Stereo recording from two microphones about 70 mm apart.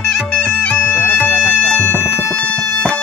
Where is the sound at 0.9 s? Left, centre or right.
Left.